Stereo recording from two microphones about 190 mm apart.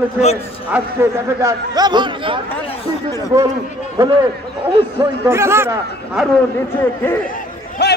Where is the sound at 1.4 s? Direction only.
20° right (ahead or behind).